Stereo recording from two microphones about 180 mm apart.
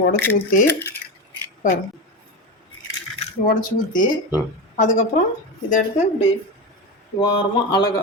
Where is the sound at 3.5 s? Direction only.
50° left (ahead or behind).